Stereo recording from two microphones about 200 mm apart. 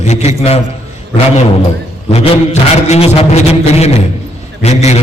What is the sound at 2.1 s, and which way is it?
A man's voice, 35° left (ahead or behind).